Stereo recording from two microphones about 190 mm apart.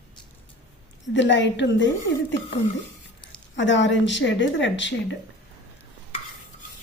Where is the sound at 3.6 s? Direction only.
70° left (ahead or behind).